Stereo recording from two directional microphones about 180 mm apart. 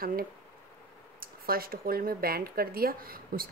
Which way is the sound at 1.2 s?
55° right (ahead or behind).